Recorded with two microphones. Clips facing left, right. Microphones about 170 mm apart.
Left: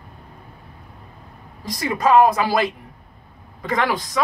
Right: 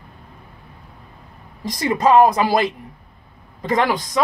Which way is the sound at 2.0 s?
25° right (ahead or behind).